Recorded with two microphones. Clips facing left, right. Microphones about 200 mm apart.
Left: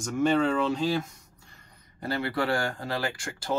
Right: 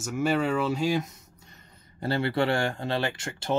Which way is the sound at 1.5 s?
30° right (ahead or behind).